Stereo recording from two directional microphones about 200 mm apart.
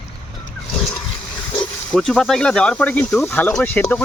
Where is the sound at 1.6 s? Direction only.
5° left (ahead or behind).